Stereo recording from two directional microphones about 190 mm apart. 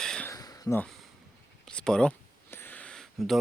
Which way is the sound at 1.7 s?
5° left (ahead or behind).